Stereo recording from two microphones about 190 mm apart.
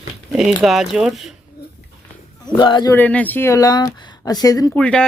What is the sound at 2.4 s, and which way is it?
Speech, 25° left (ahead or behind).